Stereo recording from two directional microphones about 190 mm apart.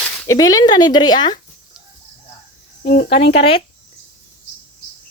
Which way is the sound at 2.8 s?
55° left (ahead or behind).